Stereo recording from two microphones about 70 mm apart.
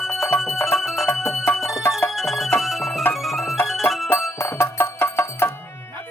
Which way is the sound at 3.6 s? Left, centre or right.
Left.